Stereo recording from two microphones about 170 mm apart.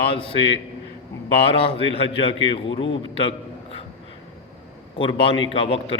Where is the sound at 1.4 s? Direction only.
35° left (ahead or behind).